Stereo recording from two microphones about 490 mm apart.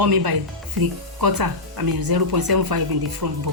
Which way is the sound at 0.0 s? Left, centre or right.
Right.